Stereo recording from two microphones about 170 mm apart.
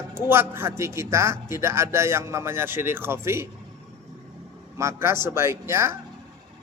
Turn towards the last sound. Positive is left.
turn(degrees=-15)  # may be behind; listen again after turning